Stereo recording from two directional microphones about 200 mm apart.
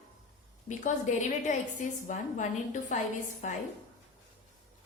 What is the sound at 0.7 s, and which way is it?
A woman's voice, 35° left (ahead or behind).